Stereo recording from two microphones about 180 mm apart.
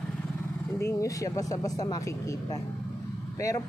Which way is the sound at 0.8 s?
15° left (ahead or behind).